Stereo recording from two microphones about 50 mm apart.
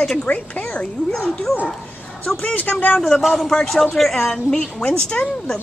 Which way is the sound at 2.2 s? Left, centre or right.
Left.